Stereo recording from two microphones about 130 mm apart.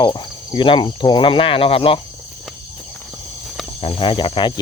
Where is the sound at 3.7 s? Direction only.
45° left (ahead or behind).